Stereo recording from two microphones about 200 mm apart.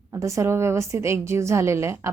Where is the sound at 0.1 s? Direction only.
15° right (ahead or behind).